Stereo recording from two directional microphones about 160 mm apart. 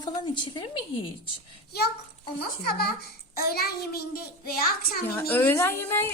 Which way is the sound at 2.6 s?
75° left (ahead or behind).